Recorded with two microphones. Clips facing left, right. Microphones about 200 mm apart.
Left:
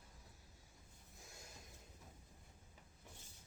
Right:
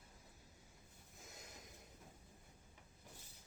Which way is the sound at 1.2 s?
20° right (ahead or behind).